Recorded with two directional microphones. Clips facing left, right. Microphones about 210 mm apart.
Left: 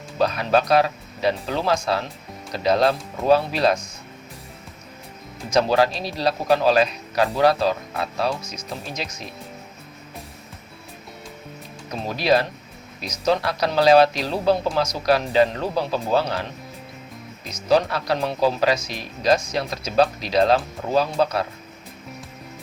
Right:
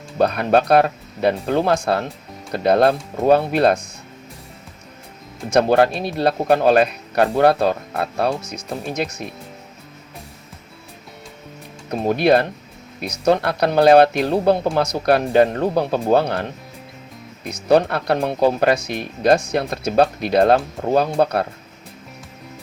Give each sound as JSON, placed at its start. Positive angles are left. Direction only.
{"t": 0.2, "sound": "speech", "side_deg": -55}
{"t": 5.5, "sound": "speech", "side_deg": -55}
{"t": 11.9, "sound": "speech", "side_deg": -55}